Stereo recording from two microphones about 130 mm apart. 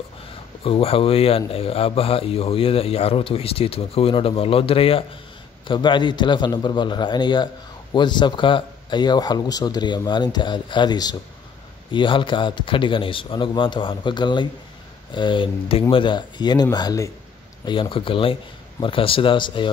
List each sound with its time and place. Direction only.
0.7 s speech: 45° left (ahead or behind); by 17.1 s 30° left (ahead or behind)
17.6 s speech: 40° left (ahead or behind)